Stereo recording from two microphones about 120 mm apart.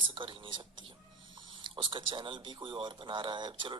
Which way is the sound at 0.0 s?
45° right (ahead or behind).